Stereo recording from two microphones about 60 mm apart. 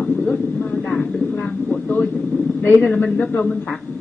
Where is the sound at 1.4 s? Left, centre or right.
Left.